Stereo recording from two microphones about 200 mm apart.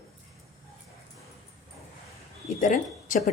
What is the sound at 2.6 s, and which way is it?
Speech, 40° left (ahead or behind).